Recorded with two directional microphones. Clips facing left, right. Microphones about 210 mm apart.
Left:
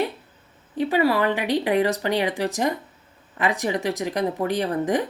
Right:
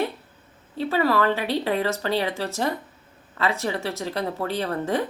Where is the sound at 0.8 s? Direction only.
15° left (ahead or behind).